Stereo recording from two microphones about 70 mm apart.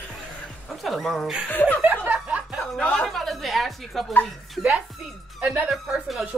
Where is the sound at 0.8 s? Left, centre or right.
Centre.